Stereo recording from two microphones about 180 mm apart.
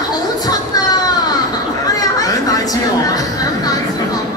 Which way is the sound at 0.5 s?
20° left (ahead or behind).